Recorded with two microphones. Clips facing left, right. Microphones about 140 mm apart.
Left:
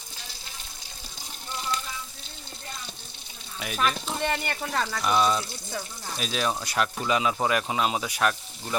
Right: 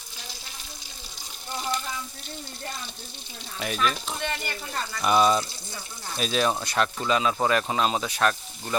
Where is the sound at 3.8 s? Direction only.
45° left (ahead or behind).